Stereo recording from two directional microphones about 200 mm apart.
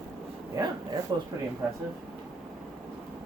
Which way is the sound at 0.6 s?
15° right (ahead or behind).